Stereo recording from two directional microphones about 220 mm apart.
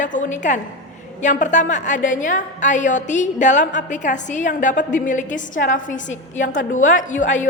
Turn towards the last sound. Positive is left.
turn(degrees=35)  # may be behind; listen again after turning